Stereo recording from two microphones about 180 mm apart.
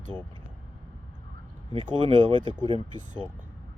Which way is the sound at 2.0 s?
25° right (ahead or behind).